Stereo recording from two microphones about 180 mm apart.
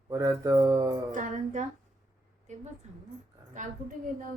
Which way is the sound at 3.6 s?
45° right (ahead or behind).